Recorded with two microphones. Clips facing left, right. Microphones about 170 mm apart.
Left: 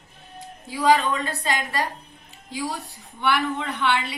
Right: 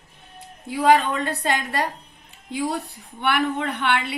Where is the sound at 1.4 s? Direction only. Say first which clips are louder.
Right 2 dB; 60° right (ahead or behind).